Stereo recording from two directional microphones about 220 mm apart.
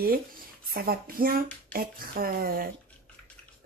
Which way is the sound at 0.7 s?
40° right (ahead or behind).